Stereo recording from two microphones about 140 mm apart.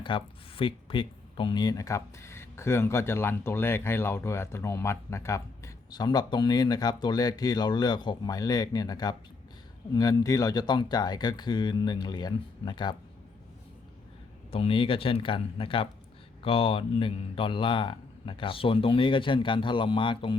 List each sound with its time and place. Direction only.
0.0 s a man's voice: 35° left (ahead or behind)
14.5 s a man's voice: 40° left (ahead or behind)